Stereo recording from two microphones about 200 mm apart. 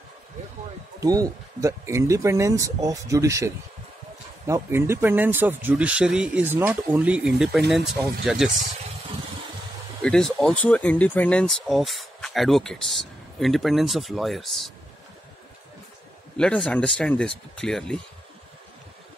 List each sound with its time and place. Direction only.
1.0 s speech: 20° right (ahead or behind); by 8.5 s centre (ahead or behind)
10.0 s speech: 5° left (ahead or behind)
16.3 s speech: 5° left (ahead or behind)